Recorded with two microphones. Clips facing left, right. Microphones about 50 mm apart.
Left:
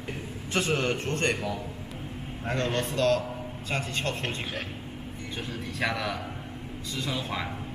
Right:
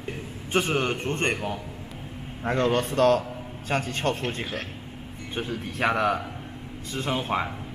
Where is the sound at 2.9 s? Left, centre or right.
Right.